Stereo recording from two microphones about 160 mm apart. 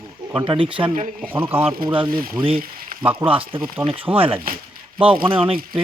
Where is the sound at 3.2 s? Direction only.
35° right (ahead or behind).